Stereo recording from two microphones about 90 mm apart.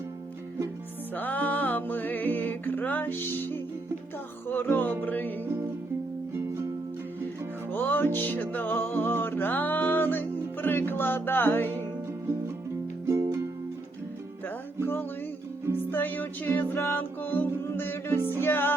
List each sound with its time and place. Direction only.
1.1 s music: 20° left (ahead or behind)
6.3 s music: 30° right (ahead or behind)
7.7 s music: 20° left (ahead or behind)
13.1 s music: 30° right (ahead or behind)
15.7 s music: 20° left (ahead or behind)